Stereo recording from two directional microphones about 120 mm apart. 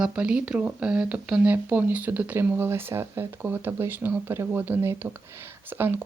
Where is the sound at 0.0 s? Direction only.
10° right (ahead or behind).